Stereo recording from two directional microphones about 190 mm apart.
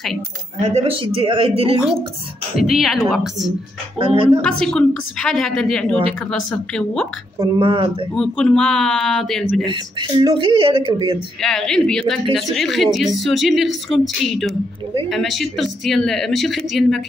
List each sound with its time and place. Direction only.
0.6 s speech: 35° right (ahead or behind)
2.5 s speech: centre (ahead or behind)
4.0 s speech: 30° right (ahead or behind)
4.4 s speech: 5° left (ahead or behind)
7.3 s speech: 25° right (ahead or behind)
8.1 s speech: 5° left (ahead or behind)
9.7 s speech: 25° right (ahead or behind)
11.4 s speech: centre (ahead or behind)